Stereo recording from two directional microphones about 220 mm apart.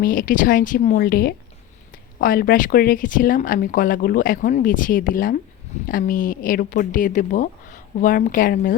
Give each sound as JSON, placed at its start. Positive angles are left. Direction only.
{"t": 0.0, "sound": "speech", "side_deg": 40}